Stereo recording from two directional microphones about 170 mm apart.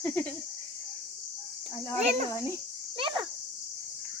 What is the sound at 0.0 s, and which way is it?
Speech, 10° left (ahead or behind).